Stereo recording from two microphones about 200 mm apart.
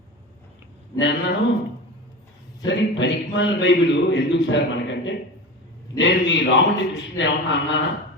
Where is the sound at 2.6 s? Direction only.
65° left (ahead or behind).